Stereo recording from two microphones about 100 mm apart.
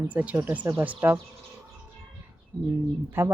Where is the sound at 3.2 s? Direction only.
25° right (ahead or behind).